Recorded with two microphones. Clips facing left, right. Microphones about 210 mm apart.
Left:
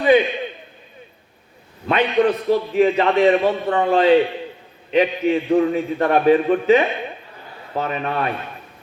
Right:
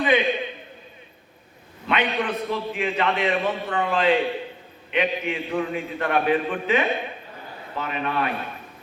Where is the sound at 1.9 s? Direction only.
40° left (ahead or behind).